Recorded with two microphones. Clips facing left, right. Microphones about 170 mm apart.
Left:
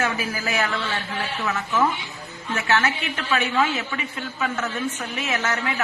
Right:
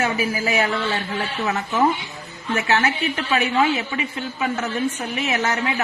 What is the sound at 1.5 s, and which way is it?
Speech, 40° right (ahead or behind).